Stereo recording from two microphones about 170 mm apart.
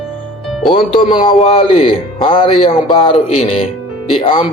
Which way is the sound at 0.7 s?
30° left (ahead or behind).